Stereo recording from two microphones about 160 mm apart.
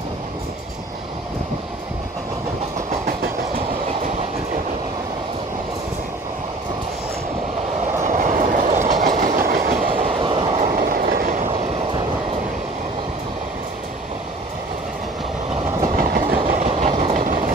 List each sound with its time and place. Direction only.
3.1 s train: 70° right (ahead or behind)
8.0 s train: 50° right (ahead or behind)
10.0 s train: 35° right (ahead or behind); by 11.5 s 60° right (ahead or behind)
16.0 s train: 60° right (ahead or behind)
16.4 s train: 45° right (ahead or behind)